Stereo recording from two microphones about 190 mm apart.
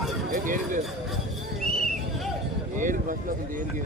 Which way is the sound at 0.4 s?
45° right (ahead or behind).